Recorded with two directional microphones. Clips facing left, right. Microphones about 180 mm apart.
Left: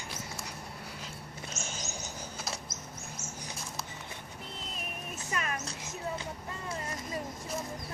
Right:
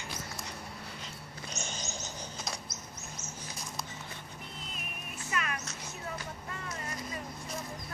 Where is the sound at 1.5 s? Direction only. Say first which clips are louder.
Right 2 dB; 5° left (ahead or behind).